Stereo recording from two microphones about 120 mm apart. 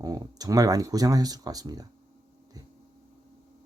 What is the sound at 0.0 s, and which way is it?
Speech, 30° right (ahead or behind).